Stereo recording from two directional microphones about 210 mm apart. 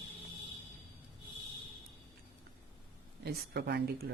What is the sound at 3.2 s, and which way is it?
Speech, 50° right (ahead or behind).